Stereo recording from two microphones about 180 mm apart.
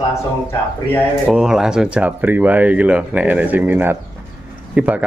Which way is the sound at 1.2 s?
Centre (ahead or behind).